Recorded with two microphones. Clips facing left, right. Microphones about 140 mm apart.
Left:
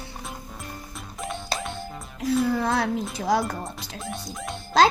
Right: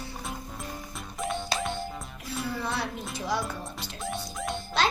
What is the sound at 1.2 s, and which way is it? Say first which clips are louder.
Music: right 1 dB; centre (ahead or behind).